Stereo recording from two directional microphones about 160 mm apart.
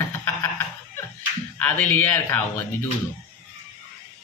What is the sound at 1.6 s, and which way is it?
Speech, 10° left (ahead or behind).